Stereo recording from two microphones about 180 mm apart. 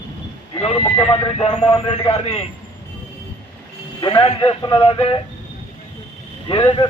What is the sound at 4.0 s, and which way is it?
Speech, 30° left (ahead or behind).